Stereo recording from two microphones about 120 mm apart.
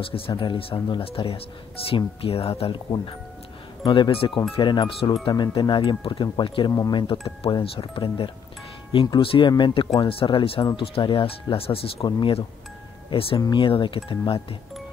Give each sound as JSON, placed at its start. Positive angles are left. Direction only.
{"t": 0.3, "sound": "speech", "side_deg": 45}
{"t": 3.9, "sound": "speech", "side_deg": 45}
{"t": 6.7, "sound": "speech", "side_deg": 30}
{"t": 7.0, "sound": "speech", "side_deg": 45}